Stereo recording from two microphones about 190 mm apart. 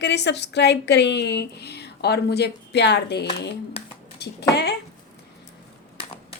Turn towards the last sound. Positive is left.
turn(degrees=60)  # may be behind; listen again after turning